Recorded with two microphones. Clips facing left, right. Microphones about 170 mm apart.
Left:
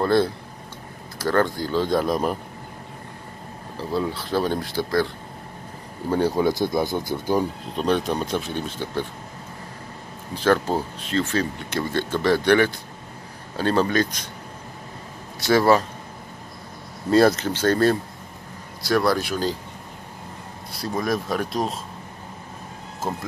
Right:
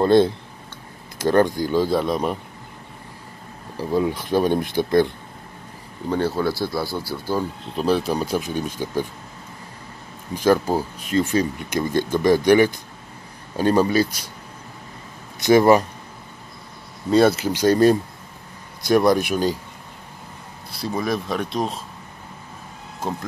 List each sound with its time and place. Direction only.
0.0 s speech: 20° right (ahead or behind)
1.9 s speech: centre (ahead or behind)
3.7 s speech: 15° right (ahead or behind)
6.0 s speech: 10° left (ahead or behind)
7.7 s speech: 5° right (ahead or behind)
10.3 s speech: 10° right (ahead or behind)
15.4 s speech: 15° right (ahead or behind)
17.1 s speech: centre (ahead or behind)
17.5 s speech: 15° right (ahead or behind)
20.7 s speech: centre (ahead or behind)
23.0 s speech: 5° left (ahead or behind)